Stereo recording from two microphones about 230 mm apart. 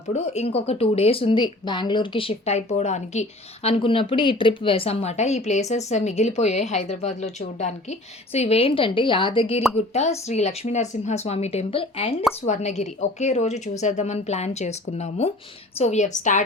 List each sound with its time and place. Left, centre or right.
0.1 s a woman's voice: left